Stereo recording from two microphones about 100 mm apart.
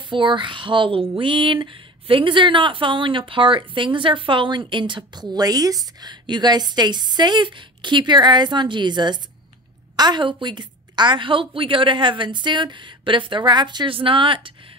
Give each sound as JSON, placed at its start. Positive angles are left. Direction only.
{"t": 0.1, "sound": "speech", "side_deg": -55}